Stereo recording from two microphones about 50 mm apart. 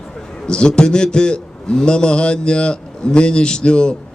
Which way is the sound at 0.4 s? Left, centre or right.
Centre.